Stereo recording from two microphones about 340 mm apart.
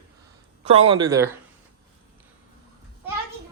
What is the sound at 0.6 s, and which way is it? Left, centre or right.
Speech, centre.